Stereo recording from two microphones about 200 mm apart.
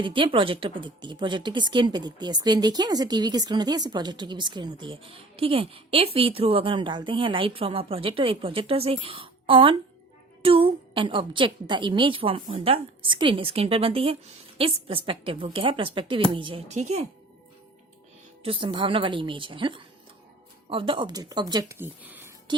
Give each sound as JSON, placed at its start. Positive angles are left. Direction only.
{"t": 0.0, "sound": "speech", "side_deg": -25}
{"t": 18.4, "sound": "speech", "side_deg": -25}